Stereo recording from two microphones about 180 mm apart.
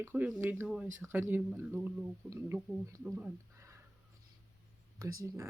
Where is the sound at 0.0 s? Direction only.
10° right (ahead or behind).